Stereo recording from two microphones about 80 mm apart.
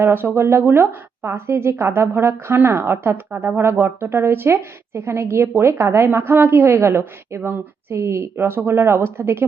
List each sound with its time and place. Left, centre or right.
0.1 s a woman's voice: right